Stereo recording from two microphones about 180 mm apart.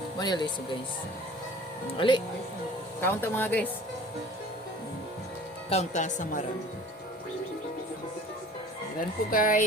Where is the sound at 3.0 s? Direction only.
10° left (ahead or behind).